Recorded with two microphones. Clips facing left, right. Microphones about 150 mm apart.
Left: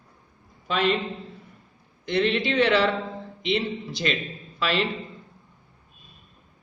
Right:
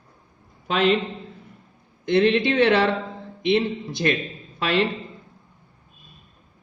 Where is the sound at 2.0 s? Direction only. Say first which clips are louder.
Right 5 dB; 55° right (ahead or behind).